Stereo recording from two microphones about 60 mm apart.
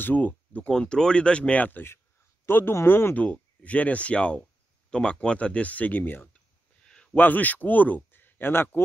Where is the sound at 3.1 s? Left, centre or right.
Left.